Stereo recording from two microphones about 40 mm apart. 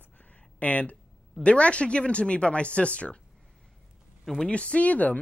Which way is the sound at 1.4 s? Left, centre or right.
Left.